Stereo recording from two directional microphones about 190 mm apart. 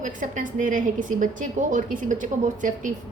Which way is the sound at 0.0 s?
45° right (ahead or behind).